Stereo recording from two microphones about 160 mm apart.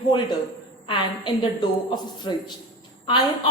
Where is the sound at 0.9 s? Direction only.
25° left (ahead or behind).